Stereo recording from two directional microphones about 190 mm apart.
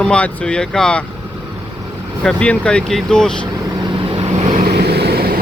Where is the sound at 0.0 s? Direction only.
5° left (ahead or behind).